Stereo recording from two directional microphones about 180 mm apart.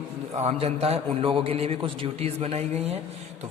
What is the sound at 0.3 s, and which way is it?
A man's voice, 35° right (ahead or behind).